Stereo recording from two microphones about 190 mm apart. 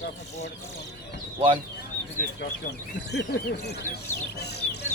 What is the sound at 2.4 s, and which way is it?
Speech, 60° left (ahead or behind).